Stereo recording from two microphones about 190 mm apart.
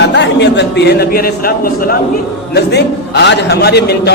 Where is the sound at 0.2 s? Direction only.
65° left (ahead or behind).